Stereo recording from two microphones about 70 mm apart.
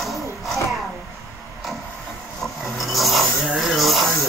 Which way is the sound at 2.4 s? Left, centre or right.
Centre.